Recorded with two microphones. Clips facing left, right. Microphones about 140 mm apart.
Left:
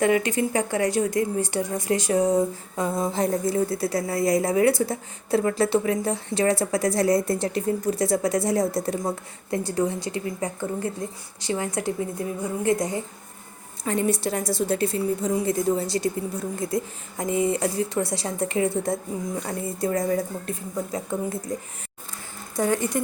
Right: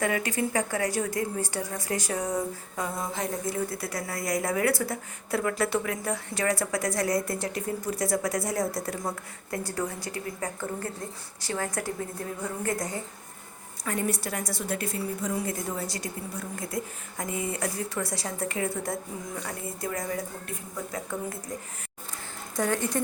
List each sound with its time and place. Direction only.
0.0 s a woman's voice: 25° left (ahead or behind)
22.5 s speech: 10° left (ahead or behind)